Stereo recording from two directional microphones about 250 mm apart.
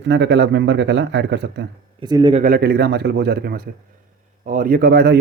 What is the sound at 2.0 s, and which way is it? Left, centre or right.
Speech, centre.